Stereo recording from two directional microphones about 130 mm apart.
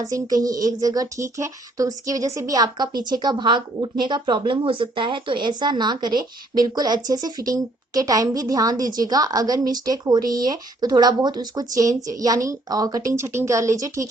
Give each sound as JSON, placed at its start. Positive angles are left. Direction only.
{"t": 0.0, "sound": "speech", "side_deg": -30}